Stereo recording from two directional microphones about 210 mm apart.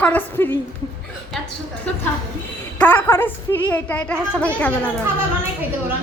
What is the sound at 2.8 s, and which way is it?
A woman's voice, 10° left (ahead or behind).